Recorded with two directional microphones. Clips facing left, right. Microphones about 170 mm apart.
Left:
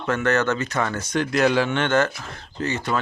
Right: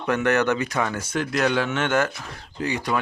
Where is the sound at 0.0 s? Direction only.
15° right (ahead or behind).